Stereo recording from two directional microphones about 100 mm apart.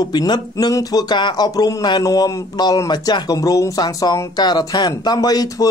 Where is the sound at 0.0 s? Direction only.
40° left (ahead or behind).